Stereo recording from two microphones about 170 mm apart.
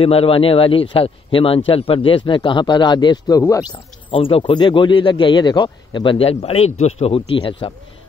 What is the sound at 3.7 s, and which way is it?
Speech, 30° left (ahead or behind).